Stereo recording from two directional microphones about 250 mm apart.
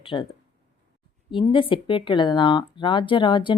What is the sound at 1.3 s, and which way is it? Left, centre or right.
Speech, centre.